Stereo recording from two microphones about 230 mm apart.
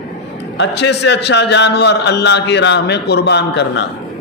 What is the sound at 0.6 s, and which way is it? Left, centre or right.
A man's voice, left.